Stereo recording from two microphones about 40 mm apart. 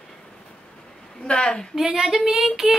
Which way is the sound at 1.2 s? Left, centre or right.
Left.